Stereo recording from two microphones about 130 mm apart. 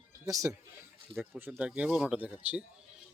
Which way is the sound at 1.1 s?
15° right (ahead or behind).